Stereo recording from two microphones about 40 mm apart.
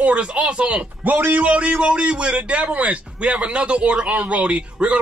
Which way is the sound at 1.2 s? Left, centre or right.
Right.